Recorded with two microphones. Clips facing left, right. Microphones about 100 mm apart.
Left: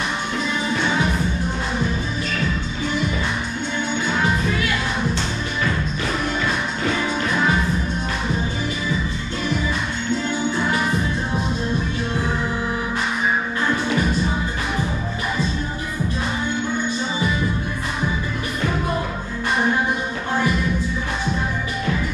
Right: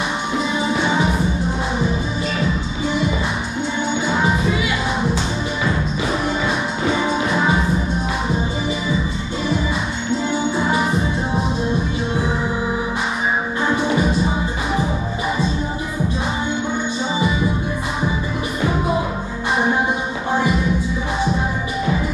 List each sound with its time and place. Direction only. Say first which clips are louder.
0.7 s music: right 2 dB; 10° right (ahead or behind)
4.1 s music: right 2 dB; 10° right (ahead or behind)
6.8 s music: right 4 dB; 15° right (ahead or behind)
10.7 s music: right 3 dB; 10° right (ahead or behind)
13.7 s music: right 3 dB; 15° right (ahead or behind)
18.6 s music: right 4 dB; 10° right (ahead or behind)
20.3 s music: right 2 dB; 10° right (ahead or behind)